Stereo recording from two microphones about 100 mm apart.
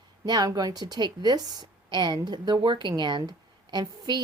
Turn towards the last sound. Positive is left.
turn(degrees=-45)  # may be behind; listen again after turning